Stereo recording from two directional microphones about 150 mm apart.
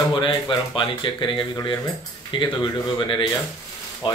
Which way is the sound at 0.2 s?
30° left (ahead or behind).